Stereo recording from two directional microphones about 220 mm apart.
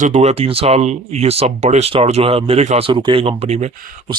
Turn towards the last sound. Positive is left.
turn(degrees=-30)  # may be behind; listen again after turning